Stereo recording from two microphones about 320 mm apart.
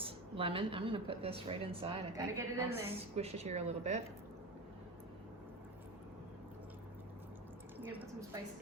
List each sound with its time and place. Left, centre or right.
0.0 s speech: centre
3.2 s speech: centre